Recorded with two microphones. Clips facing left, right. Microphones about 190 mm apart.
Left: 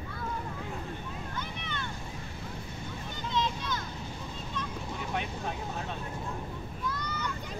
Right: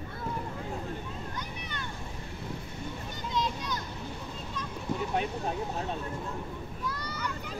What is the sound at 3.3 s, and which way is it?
Vehicle, 10° right (ahead or behind).